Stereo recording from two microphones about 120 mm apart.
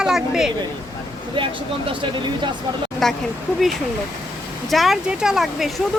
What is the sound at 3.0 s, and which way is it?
Speech, 5° left (ahead or behind).